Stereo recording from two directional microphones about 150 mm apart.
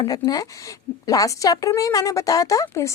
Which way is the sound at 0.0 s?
25° left (ahead or behind).